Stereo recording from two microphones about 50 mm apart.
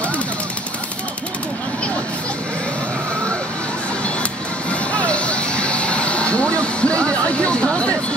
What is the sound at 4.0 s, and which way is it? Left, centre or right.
Music, left.